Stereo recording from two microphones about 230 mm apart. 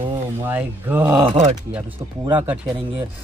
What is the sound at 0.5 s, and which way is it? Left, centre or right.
Speech, centre.